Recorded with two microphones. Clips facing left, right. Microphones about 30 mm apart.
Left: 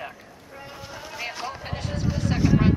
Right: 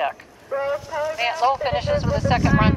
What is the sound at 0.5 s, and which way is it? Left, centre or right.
Speech, right.